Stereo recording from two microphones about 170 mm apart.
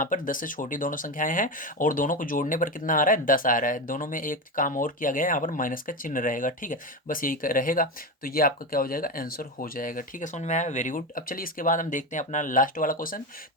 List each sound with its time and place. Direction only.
0.0 s speech: 50° left (ahead or behind)